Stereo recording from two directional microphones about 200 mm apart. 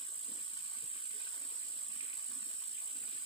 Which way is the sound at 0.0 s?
25° left (ahead or behind).